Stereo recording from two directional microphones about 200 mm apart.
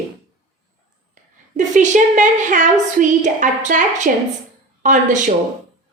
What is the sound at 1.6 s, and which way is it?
A woman's voice, 40° right (ahead or behind).